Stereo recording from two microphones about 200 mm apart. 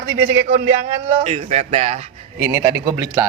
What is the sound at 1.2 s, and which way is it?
Speech, 30° right (ahead or behind).